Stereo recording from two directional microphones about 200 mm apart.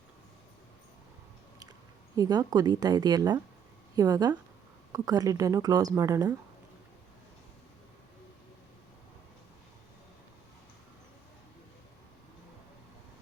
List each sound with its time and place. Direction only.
2.1 s speech: 20° right (ahead or behind)